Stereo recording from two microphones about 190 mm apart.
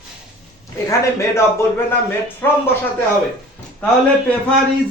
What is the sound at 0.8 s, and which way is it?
Speech, 15° left (ahead or behind).